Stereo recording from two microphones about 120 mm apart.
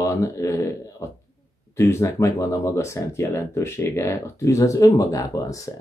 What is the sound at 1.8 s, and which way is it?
Speech, 25° left (ahead or behind).